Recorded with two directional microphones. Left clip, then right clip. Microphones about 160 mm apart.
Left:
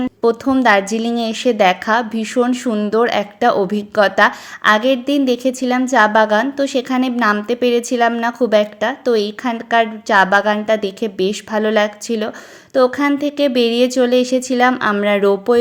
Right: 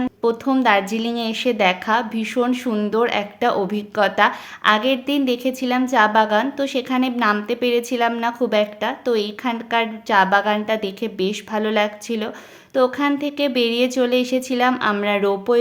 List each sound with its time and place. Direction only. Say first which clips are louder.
0.2 s a woman's voice: left 5 dB; 30° left (ahead or behind)